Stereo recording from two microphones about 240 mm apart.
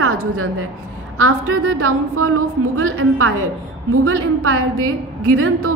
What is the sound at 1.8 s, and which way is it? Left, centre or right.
A woman's voice, right.